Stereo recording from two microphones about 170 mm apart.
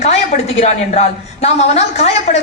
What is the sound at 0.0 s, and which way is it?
A woman's voice, 40° left (ahead or behind).